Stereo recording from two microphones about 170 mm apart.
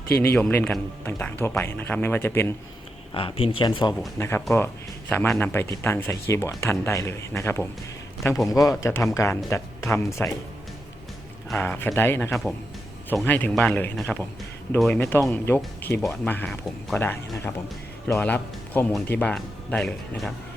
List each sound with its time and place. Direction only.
0.2 s speech: 10° left (ahead or behind)
3.2 s speech: 35° left (ahead or behind)
4.2 s speech: 15° left (ahead or behind)
11.5 s speech: 10° left (ahead or behind)
12.3 s speech: centre (ahead or behind)
15.0 s speech: 15° left (ahead or behind)